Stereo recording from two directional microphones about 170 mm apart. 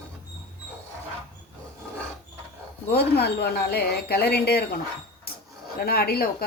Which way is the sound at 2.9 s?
70° left (ahead or behind).